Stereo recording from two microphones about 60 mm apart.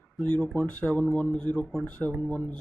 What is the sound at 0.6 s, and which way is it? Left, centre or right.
Speech, left.